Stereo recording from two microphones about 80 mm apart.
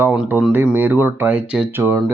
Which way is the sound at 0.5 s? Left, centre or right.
Right.